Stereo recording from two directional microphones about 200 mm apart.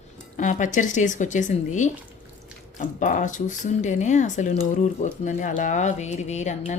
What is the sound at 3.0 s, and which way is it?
Speech, 40° left (ahead or behind).